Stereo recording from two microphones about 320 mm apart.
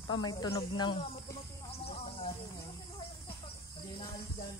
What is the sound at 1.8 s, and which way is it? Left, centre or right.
Snake, centre.